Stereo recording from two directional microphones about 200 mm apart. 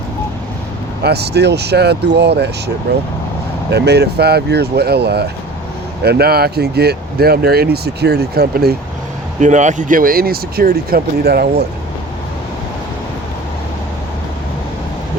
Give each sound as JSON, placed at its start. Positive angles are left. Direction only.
{"t": 1.0, "sound": "speech", "side_deg": -55}
{"t": 9.4, "sound": "speech", "side_deg": -35}